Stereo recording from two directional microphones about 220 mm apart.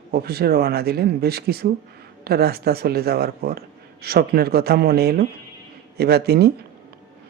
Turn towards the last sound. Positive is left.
turn(degrees=-45)  # may be behind; listen again after turning